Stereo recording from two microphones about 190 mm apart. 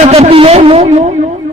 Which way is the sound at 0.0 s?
35° right (ahead or behind).